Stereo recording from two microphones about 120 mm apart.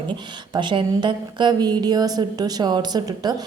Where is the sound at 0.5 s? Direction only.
40° right (ahead or behind).